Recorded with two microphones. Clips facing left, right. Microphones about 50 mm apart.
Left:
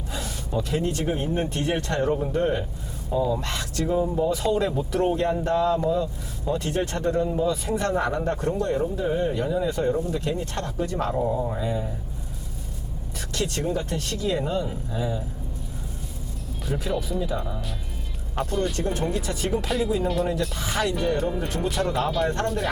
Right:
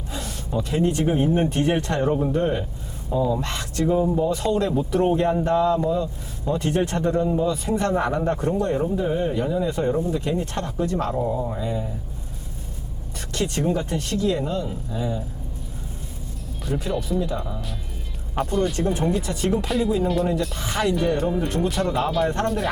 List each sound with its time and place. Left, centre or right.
0.1 s a sound: centre
0.8 s speech: right
1.0 s speech: centre
3.4 s speech: centre
4.7 s speech: centre
6.6 s speech: right
7.4 s speech: centre
7.7 s speech: centre
8.8 s speech: centre
10.3 s speech: right
10.8 s speech: centre
13.3 s speech: centre
14.2 s speech: centre
16.6 s speech: centre